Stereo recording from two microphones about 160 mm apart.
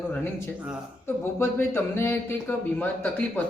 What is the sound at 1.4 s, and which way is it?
A man's voice, 15° left (ahead or behind).